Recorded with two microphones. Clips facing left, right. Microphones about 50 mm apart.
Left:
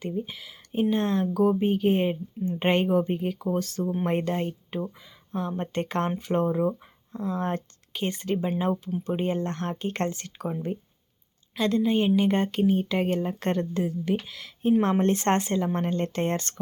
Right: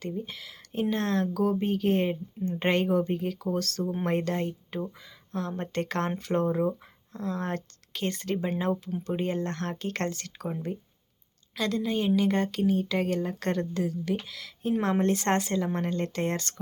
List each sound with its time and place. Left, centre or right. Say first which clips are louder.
0.0 s speech: left 3 dB; centre
11.5 s speech: left 5 dB; left